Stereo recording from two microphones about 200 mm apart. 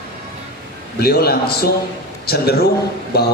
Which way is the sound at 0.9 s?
50° left (ahead or behind).